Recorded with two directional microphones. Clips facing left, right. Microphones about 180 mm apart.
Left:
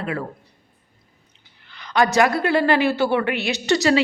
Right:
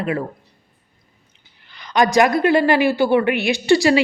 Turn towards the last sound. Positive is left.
turn(degrees=-10)  # may be behind; listen again after turning